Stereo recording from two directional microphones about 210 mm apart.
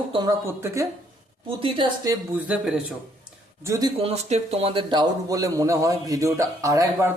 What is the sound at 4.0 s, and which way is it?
Speech, 30° right (ahead or behind).